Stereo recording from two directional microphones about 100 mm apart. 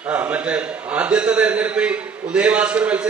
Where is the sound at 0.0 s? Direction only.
10° right (ahead or behind).